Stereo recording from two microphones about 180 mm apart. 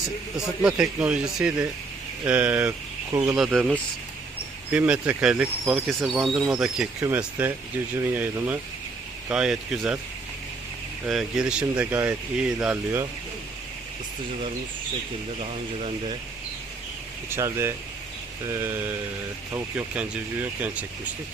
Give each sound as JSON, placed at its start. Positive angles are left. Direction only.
{"t": 0.3, "sound": "speech", "side_deg": -5}
{"t": 11.0, "sound": "speech", "side_deg": -5}
{"t": 15.4, "sound": "speech", "side_deg": -35}
{"t": 17.2, "sound": "speech", "side_deg": -15}